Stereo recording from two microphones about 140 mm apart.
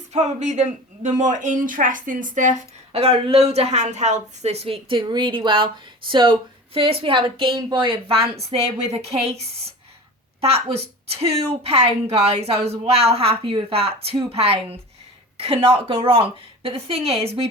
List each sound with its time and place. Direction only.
0.1 s speech: 55° right (ahead or behind)